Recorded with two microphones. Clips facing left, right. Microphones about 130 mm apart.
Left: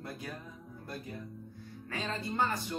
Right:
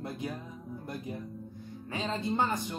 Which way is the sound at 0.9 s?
20° right (ahead or behind).